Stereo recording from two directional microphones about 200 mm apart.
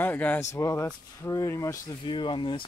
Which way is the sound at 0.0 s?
10° left (ahead or behind).